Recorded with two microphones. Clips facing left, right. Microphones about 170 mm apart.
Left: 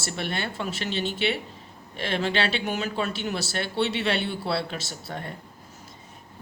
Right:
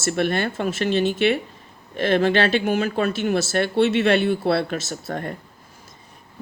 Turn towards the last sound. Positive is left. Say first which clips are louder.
# right 7 dB
turn(degrees=-50)  # may be behind; listen again after turning